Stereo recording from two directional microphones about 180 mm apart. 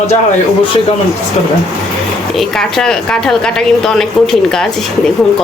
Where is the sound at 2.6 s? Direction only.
5° left (ahead or behind).